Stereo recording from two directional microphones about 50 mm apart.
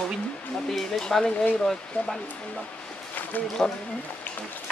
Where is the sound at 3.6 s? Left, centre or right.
Centre.